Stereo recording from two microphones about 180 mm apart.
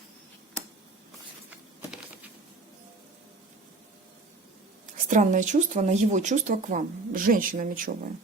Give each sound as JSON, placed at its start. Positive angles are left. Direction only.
{"t": 4.9, "sound": "speech", "side_deg": -45}